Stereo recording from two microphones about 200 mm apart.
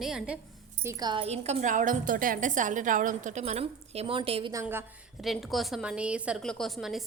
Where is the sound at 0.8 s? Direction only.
20° right (ahead or behind).